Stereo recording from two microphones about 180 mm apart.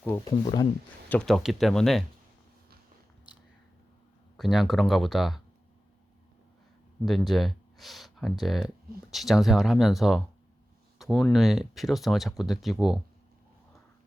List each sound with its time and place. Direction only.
0.3 s speech: 25° left (ahead or behind)
1.1 s speech: centre (ahead or behind)
4.4 s speech: centre (ahead or behind)
7.0 s speech: centre (ahead or behind)